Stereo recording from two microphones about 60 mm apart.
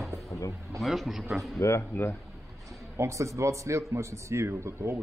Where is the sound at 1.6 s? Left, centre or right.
Left.